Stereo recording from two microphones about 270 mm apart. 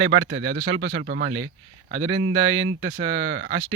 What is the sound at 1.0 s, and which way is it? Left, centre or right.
Speech, right.